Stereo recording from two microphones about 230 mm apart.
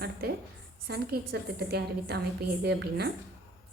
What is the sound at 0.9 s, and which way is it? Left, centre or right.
A woman's voice, right.